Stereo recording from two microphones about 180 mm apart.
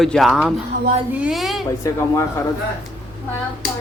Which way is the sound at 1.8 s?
15° left (ahead or behind).